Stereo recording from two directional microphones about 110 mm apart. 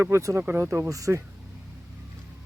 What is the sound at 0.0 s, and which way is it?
Speech, 25° right (ahead or behind).